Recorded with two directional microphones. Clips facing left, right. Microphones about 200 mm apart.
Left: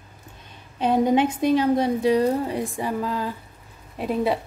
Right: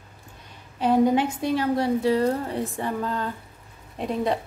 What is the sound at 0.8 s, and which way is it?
A woman's voice, 20° left (ahead or behind).